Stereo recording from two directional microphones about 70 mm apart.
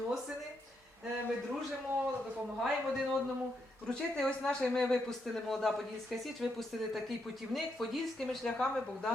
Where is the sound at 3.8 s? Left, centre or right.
Centre.